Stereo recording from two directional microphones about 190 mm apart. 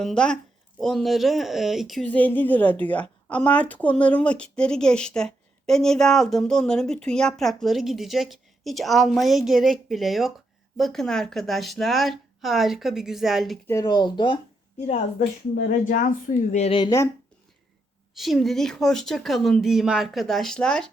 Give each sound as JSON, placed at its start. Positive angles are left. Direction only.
{"t": 0.0, "sound": "speech", "side_deg": 5}
{"t": 13.7, "sound": "speech", "side_deg": 20}
{"t": 15.5, "sound": "speech", "side_deg": 45}
{"t": 18.2, "sound": "speech", "side_deg": 0}